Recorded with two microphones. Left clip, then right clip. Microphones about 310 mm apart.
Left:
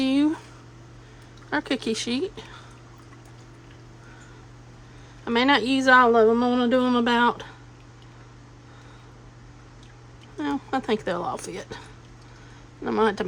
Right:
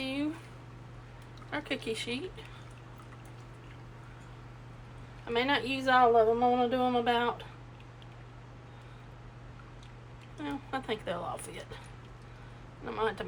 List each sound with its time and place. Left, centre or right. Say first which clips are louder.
0.0 s a sound: left 12 dB; left
1.5 s speech: left 9 dB; centre
5.2 s speech: left 9 dB; left
10.4 s speech: left 10 dB; centre
12.8 s speech: left 10 dB; centre